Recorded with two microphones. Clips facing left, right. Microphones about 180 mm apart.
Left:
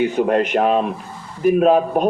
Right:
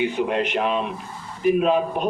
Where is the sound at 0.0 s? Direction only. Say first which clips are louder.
Left 5 dB; 45° left (ahead or behind).